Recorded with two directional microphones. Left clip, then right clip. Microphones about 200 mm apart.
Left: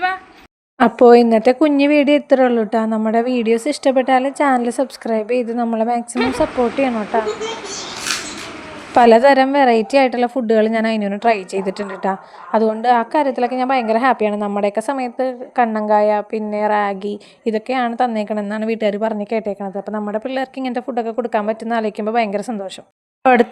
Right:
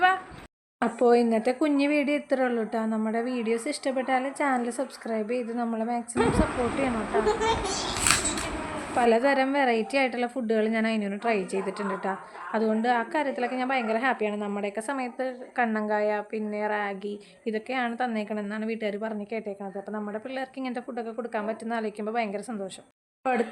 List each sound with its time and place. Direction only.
0.8 s a woman's voice: 40° left (ahead or behind)
9.0 s a woman's voice: 40° left (ahead or behind)